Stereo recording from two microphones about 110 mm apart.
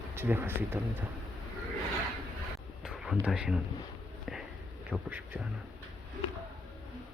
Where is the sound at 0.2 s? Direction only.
20° right (ahead or behind).